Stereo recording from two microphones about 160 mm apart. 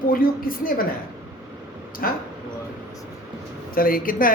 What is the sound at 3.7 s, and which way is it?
Speech, 65° left (ahead or behind).